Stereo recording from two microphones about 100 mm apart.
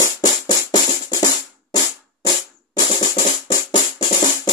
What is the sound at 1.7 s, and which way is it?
Drum, 40° left (ahead or behind).